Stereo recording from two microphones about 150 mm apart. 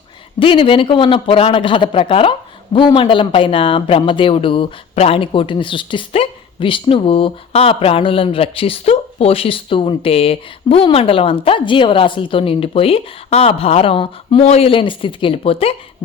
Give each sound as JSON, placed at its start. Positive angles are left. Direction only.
{"t": 0.3, "sound": "speech", "side_deg": 35}